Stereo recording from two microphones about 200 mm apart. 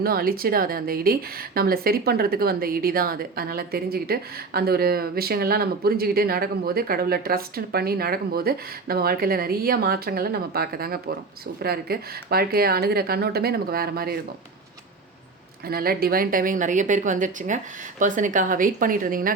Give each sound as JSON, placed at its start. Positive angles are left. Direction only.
{"t": 0.0, "sound": "a woman's voice", "side_deg": -50}
{"t": 15.6, "sound": "a woman's voice", "side_deg": -50}